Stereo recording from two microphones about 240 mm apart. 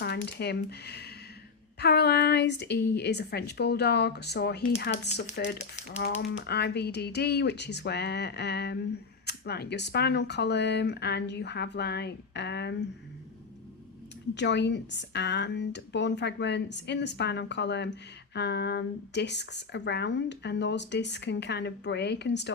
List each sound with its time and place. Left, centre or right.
0.0 s speech: left
14.3 s speech: left